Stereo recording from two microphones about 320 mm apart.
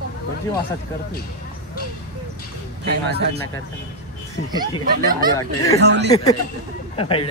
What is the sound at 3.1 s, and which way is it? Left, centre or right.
Speech, right.